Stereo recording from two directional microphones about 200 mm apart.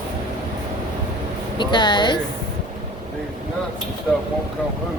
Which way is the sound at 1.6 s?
20° left (ahead or behind).